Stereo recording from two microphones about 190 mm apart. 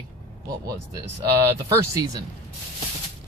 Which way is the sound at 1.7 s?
20° right (ahead or behind).